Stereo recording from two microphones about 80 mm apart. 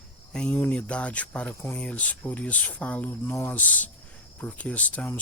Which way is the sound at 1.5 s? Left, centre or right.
Left.